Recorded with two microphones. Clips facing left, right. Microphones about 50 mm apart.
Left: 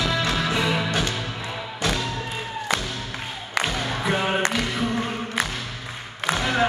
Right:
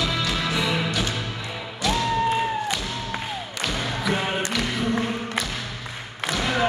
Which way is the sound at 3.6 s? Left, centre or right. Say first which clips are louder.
Right 2 dB; left.